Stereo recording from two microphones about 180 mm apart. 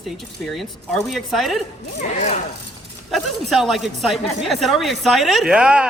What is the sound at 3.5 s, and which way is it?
A woman's voice, centre (ahead or behind).